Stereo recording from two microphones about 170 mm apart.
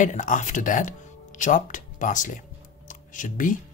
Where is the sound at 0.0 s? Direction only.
50° left (ahead or behind).